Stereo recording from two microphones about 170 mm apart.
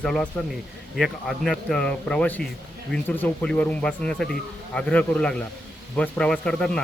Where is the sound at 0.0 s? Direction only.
5° left (ahead or behind).